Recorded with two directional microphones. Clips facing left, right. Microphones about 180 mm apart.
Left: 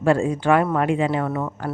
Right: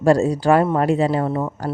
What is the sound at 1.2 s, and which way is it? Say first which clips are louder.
Speech: right 3 dB; 25° right (ahead or behind).